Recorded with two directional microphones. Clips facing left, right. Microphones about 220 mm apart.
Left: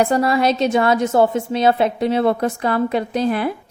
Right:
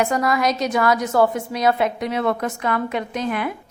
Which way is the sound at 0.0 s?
30° left (ahead or behind).